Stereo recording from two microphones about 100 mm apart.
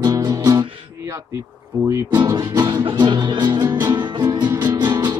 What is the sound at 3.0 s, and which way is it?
Music, 45° right (ahead or behind).